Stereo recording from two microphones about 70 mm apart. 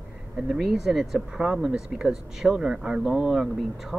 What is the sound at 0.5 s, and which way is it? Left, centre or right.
Speech, centre.